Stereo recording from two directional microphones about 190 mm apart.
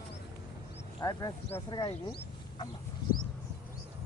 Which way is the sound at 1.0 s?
20° left (ahead or behind).